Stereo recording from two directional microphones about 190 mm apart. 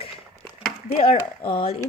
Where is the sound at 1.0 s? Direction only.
30° left (ahead or behind).